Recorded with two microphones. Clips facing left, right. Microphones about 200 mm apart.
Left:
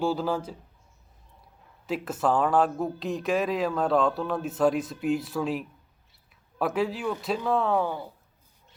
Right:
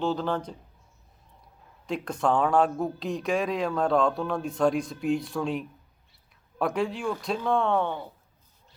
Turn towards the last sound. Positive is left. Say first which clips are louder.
# even
turn(degrees=5)  # may be behind; listen again after turning